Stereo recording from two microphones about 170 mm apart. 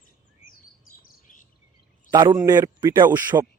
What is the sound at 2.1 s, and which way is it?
Speech, 25° right (ahead or behind).